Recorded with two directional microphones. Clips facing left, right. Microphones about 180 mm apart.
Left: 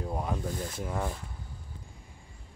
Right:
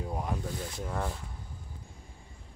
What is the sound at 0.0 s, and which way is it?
Speech, centre (ahead or behind).